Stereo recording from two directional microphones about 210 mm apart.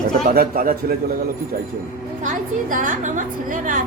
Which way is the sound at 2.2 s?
40° right (ahead or behind).